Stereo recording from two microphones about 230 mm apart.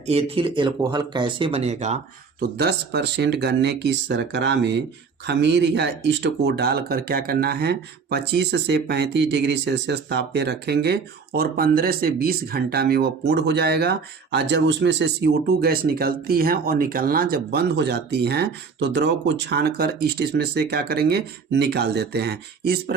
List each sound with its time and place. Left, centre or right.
0.0 s speech: right
2.4 s speech: right